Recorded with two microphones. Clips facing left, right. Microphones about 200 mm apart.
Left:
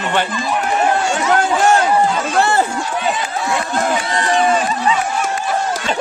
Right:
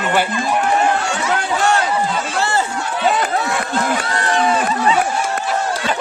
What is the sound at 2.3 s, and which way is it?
Run, 55° left (ahead or behind).